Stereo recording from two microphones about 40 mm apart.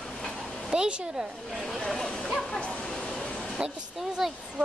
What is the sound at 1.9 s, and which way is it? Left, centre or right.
Speech, centre.